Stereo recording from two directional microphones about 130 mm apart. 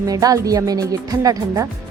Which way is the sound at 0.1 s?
30° right (ahead or behind).